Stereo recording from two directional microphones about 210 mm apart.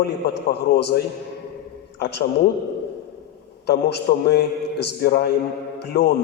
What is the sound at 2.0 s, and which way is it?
Speech, 50° left (ahead or behind).